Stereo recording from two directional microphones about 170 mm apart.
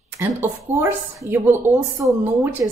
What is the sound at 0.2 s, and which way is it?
Speech, 15° right (ahead or behind).